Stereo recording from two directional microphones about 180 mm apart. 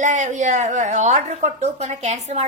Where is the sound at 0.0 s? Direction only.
40° right (ahead or behind).